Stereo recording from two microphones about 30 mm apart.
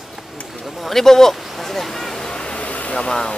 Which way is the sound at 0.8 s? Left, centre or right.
Centre.